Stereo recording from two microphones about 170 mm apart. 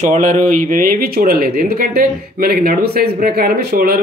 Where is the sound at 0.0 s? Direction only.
50° right (ahead or behind).